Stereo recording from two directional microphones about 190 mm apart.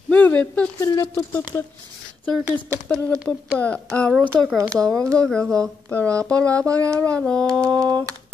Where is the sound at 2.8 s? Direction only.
5° left (ahead or behind).